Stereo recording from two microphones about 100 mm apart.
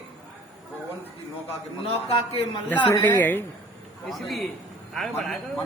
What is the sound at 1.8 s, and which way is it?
Speech, 75° left (ahead or behind).